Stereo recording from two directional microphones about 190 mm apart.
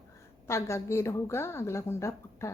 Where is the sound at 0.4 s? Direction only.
15° left (ahead or behind).